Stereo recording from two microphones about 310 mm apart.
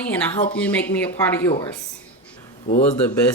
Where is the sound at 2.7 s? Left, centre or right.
Left.